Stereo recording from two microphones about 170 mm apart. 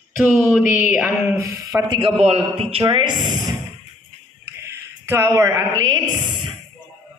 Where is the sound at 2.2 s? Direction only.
40° right (ahead or behind).